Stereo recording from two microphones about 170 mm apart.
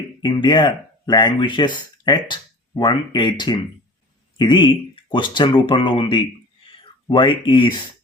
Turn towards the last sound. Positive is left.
turn(degrees=25)  # may be behind; listen again after turning